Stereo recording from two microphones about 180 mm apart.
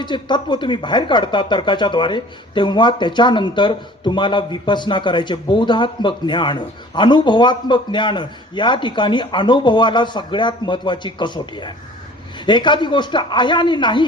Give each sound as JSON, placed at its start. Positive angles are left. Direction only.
{"t": 0.0, "sound": "speech", "side_deg": 25}